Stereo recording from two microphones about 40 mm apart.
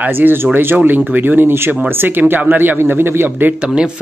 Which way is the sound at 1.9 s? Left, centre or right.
Right.